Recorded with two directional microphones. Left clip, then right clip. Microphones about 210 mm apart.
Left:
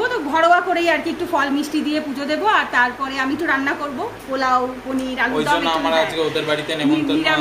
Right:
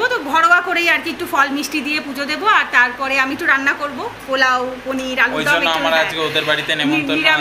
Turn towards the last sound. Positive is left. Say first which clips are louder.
# right 2 dB
turn(degrees=-5)  # may be behind; listen again after turning